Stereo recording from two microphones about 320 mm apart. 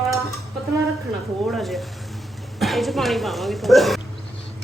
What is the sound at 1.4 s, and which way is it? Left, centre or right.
A man's voice, centre.